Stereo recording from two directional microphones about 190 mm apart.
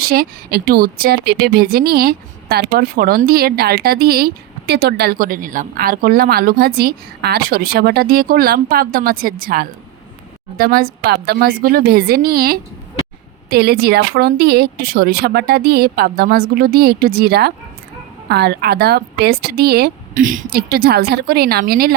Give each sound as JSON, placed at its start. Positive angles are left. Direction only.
{"t": 0.0, "sound": "a woman's voice", "side_deg": -55}